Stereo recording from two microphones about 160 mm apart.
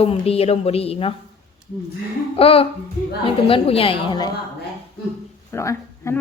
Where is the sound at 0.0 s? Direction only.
40° left (ahead or behind).